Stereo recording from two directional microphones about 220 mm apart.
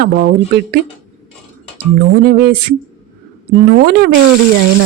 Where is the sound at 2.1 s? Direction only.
45° right (ahead or behind).